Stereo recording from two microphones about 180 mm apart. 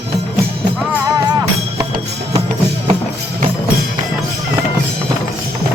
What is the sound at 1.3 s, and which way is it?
Music, 20° right (ahead or behind).